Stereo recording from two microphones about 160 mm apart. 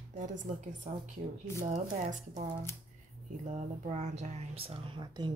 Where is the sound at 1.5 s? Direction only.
40° right (ahead or behind).